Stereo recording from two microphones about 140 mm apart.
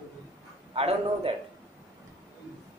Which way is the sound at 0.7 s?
45° right (ahead or behind).